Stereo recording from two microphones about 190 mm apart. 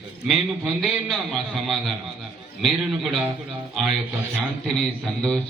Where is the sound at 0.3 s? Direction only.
Centre (ahead or behind).